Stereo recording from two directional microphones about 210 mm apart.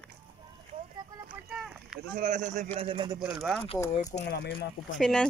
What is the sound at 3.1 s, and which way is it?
Speech, 5° right (ahead or behind).